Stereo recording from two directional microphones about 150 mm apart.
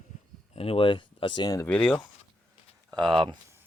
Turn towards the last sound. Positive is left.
turn(degrees=-35)  # may be behind; listen again after turning